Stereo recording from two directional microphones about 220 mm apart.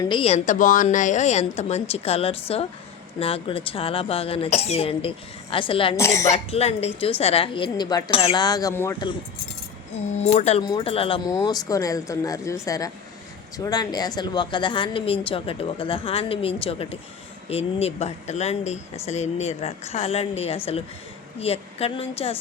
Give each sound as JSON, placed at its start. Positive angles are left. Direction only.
{"t": 0.0, "sound": "a woman's voice", "side_deg": 25}
{"t": 6.3, "sound": "a woman's voice", "side_deg": 30}
{"t": 10.2, "sound": "a woman's voice", "side_deg": 30}